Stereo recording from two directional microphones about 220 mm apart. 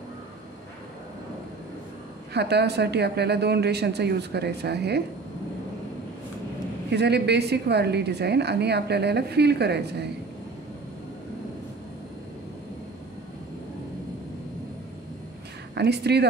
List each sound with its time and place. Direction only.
2.3 s a woman's voice: 50° right (ahead or behind)
6.9 s a woman's voice: 50° right (ahead or behind)
15.7 s a woman's voice: 50° right (ahead or behind)